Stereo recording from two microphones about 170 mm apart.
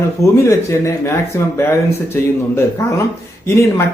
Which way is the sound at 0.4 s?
15° left (ahead or behind).